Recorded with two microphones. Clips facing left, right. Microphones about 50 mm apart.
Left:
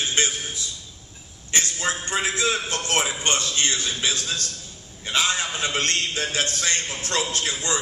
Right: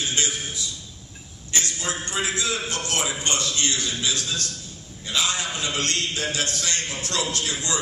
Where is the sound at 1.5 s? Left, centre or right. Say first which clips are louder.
Left 3 dB; left.